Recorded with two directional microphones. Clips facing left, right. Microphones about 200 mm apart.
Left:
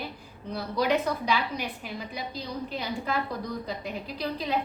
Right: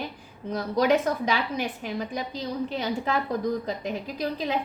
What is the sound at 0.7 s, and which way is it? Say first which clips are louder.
A woman's voice: right 4 dB; 50° right (ahead or behind).